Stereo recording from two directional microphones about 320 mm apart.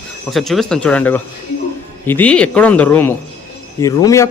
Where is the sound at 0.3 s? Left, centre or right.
Centre.